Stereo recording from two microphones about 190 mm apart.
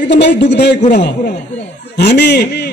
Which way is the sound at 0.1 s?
65° left (ahead or behind).